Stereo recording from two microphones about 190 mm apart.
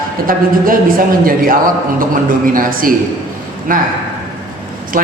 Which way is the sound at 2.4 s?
45° right (ahead or behind).